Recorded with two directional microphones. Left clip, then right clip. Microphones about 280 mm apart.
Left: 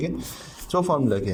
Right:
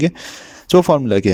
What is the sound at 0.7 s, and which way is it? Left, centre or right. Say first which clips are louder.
Speech: right 9 dB; right.